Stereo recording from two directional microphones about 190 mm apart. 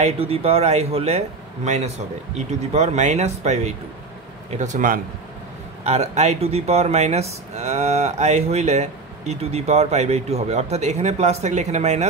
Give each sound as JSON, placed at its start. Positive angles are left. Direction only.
{"t": 0.0, "sound": "speech", "side_deg": -30}